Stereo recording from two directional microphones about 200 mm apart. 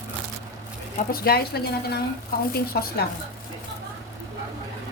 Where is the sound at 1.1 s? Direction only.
50° left (ahead or behind).